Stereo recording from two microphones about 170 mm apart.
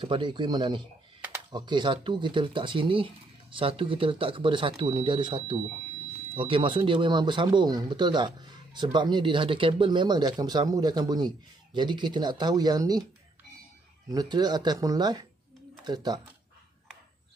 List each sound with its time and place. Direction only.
0.0 s speech: 30° right (ahead or behind)
14.1 s speech: 25° right (ahead or behind)